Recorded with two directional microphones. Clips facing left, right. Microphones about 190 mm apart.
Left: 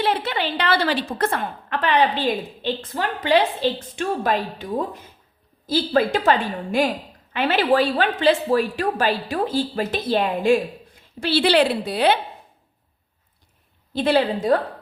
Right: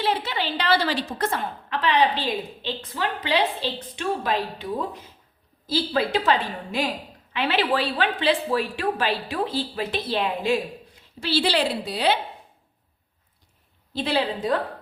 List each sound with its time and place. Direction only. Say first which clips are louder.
0.0 s a woman's voice: left 3 dB; 55° left (ahead or behind)
5.6 s a woman's voice: left 4 dB; 50° left (ahead or behind)
11.2 s a woman's voice: left 5 dB; 60° left (ahead or behind)
13.9 s a woman's voice: left 5 dB; 55° left (ahead or behind)